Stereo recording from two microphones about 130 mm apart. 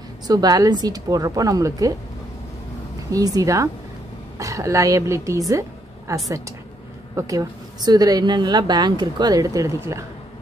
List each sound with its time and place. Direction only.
0.3 s a woman's voice: 30° right (ahead or behind)
3.1 s a woman's voice: 25° right (ahead or behind)
5.5 s a sound: 25° right (ahead or behind)
7.2 s a woman's voice: 30° right (ahead or behind)